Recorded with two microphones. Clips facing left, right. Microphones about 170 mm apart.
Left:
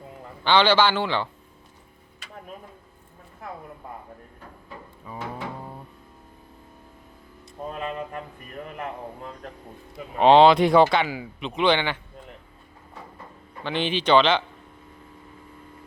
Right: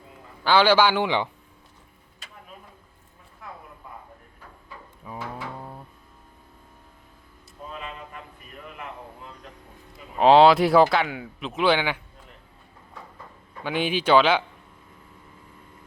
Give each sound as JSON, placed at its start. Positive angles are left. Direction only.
{"t": 0.4, "sound": "a man's voice", "side_deg": -10}
{"t": 5.0, "sound": "drawer open or close", "side_deg": 0}
{"t": 7.7, "sound": "a sound", "side_deg": 45}
{"t": 9.9, "sound": "speech", "side_deg": 0}
{"t": 13.7, "sound": "a man's voice", "side_deg": -10}